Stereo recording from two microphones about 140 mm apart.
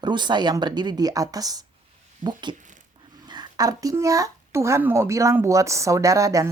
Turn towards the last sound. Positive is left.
turn(degrees=-25)  # may be behind; listen again after turning